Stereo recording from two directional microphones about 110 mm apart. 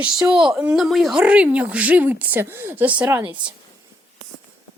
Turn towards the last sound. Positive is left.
turn(degrees=-20)  # may be behind; listen again after turning